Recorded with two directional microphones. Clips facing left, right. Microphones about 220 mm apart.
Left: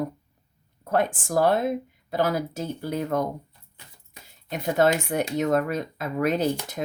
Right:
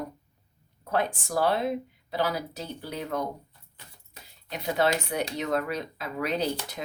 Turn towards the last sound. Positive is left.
turn(degrees=50)  # may be behind; listen again after turning